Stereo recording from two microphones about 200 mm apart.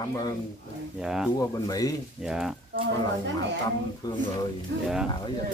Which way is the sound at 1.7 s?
20° left (ahead or behind).